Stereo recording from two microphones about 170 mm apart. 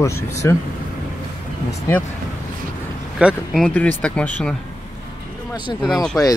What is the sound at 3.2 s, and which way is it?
Speech, 5° right (ahead or behind).